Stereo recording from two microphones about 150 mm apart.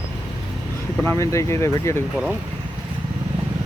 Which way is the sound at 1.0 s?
20° left (ahead or behind).